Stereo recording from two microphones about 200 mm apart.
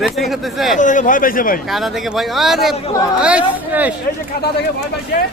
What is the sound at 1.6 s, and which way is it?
A man's voice, centre (ahead or behind).